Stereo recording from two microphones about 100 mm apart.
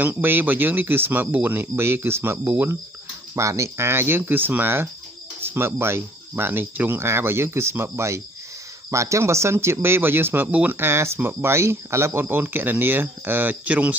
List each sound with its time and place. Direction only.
0.0 s speech: 20° right (ahead or behind)